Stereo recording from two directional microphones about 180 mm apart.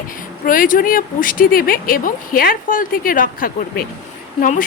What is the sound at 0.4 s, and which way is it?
Speech, 50° left (ahead or behind).